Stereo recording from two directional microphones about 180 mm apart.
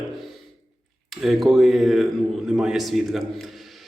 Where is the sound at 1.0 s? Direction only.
Centre (ahead or behind).